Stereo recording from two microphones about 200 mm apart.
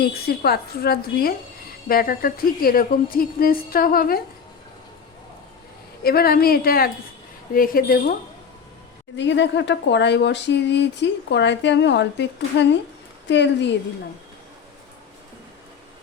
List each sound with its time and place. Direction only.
0.0 s a woman's voice: 50° left (ahead or behind)
6.0 s a woman's voice: 50° left (ahead or behind)
9.1 s speech: 65° left (ahead or behind)